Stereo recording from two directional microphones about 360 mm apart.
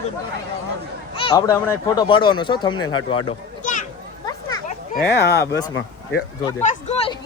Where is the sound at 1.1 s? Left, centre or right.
Centre.